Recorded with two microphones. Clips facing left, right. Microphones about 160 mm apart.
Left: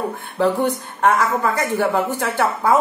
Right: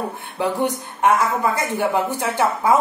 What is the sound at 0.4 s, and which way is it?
A woman's voice, 15° right (ahead or behind).